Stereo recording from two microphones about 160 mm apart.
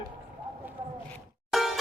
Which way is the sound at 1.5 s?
Centre (ahead or behind).